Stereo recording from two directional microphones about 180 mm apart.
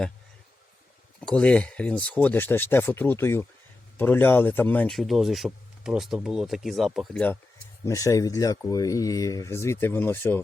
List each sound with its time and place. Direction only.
1.4 s speech: 5° left (ahead or behind)
7.9 s speech: 20° left (ahead or behind)